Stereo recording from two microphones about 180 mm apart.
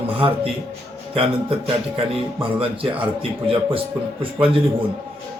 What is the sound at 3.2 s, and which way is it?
A man's voice, 30° right (ahead or behind).